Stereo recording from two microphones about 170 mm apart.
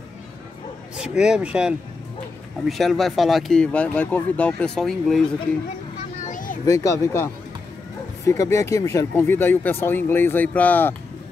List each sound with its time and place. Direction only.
0.9 s speech: 5° right (ahead or behind)
6.2 s children playing: 50° left (ahead or behind)
6.6 s speech: 20° left (ahead or behind)
8.3 s speech: 15° left (ahead or behind)